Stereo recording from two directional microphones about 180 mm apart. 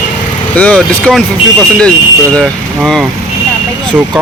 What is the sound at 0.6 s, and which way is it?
Speech, 5° left (ahead or behind).